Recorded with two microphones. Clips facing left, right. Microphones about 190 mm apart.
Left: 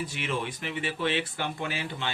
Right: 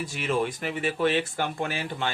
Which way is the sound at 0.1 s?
45° right (ahead or behind).